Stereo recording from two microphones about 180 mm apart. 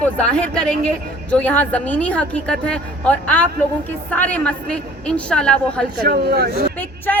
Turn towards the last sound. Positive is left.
turn(degrees=10)  # may be behind; listen again after turning